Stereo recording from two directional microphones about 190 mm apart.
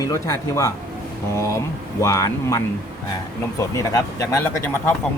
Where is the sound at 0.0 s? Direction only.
15° left (ahead or behind).